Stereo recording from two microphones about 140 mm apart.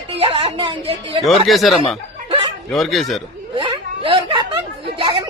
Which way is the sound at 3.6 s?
35° right (ahead or behind).